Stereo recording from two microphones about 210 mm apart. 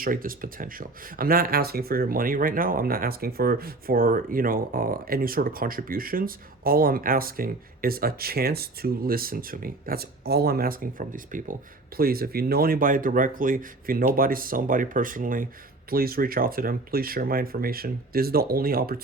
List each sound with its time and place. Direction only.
0.0 s speech: 40° right (ahead or behind)